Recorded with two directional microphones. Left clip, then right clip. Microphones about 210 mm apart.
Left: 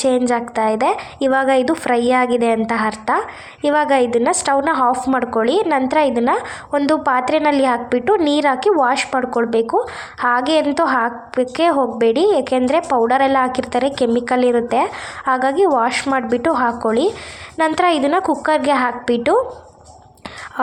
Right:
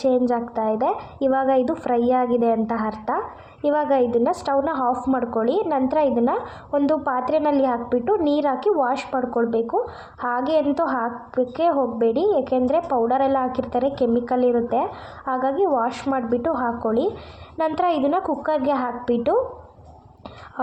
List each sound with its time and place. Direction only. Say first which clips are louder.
0.0 s a woman's voice: left 4 dB; 25° left (ahead or behind)